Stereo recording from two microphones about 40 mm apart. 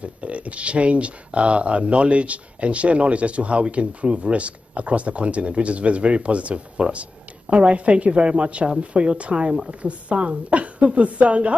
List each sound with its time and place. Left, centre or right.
0.0 s speech: right